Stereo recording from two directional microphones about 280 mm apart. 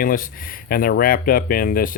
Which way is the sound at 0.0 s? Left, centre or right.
Left.